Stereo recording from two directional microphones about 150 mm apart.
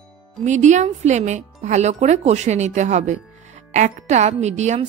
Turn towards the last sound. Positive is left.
turn(degrees=-50)  # may be behind; listen again after turning